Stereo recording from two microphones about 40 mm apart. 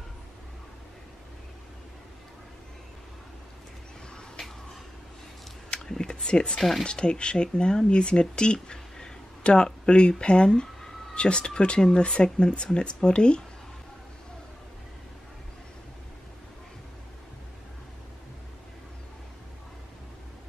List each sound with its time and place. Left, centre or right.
5.9 s speech: centre